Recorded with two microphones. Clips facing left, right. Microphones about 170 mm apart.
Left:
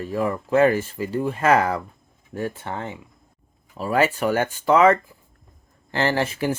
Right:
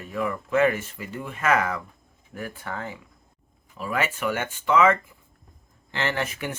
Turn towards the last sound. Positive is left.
turn(degrees=30)  # may be behind; listen again after turning